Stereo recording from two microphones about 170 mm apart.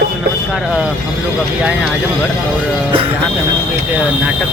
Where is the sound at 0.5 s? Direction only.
Centre (ahead or behind).